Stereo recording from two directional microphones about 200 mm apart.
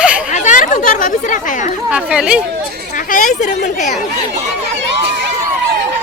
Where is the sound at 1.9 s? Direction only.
5° right (ahead or behind).